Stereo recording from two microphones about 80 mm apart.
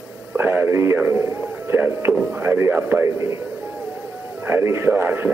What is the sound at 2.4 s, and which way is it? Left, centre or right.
A man's voice, right.